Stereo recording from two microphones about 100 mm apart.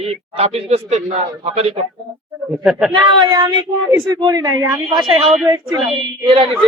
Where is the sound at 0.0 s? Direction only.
90° right.